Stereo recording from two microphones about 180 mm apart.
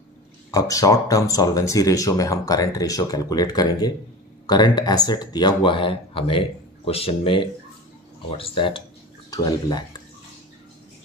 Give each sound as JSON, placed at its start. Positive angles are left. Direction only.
{"t": 0.5, "sound": "speech", "side_deg": 20}